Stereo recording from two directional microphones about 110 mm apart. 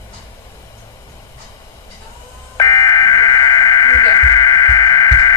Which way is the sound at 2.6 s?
30° left (ahead or behind).